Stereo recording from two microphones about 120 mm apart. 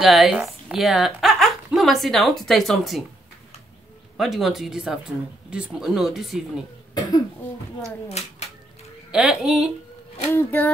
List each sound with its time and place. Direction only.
0.0 s speech: centre (ahead or behind)
4.2 s speech: centre (ahead or behind)
9.1 s speech: 5° right (ahead or behind)
10.3 s speech: 15° left (ahead or behind)